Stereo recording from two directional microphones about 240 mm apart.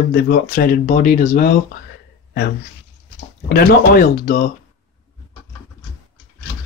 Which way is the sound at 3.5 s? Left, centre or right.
Left.